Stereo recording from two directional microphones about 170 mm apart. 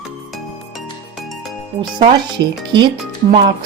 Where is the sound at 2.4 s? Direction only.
90° right.